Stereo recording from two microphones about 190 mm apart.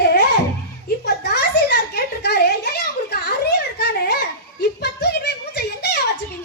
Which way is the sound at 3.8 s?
55° left (ahead or behind).